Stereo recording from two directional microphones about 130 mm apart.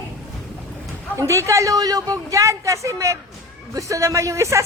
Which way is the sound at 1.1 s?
20° right (ahead or behind).